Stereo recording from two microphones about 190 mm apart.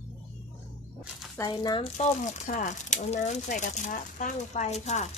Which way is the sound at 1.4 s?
20° left (ahead or behind).